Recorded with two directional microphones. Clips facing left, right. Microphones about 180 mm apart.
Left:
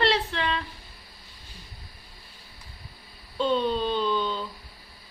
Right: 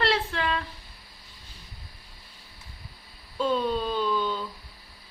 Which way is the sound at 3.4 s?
5° right (ahead or behind).